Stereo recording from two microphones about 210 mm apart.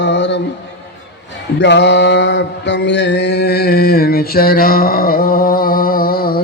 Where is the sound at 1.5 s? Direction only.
55° left (ahead or behind).